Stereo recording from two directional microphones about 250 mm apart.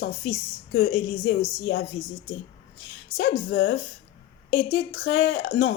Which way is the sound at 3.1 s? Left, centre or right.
Left.